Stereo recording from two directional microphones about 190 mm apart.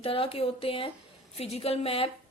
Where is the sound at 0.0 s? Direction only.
30° left (ahead or behind).